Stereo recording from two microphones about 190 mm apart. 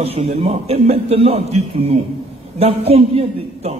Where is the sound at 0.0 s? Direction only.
30° right (ahead or behind).